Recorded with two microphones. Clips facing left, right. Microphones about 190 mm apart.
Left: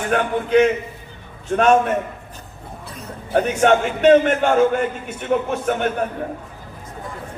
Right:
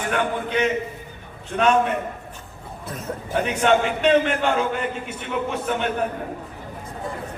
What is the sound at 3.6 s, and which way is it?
A man's voice, 50° left (ahead or behind).